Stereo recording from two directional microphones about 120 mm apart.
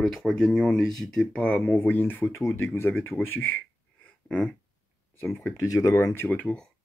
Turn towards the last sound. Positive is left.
turn(degrees=10)  # may be behind; listen again after turning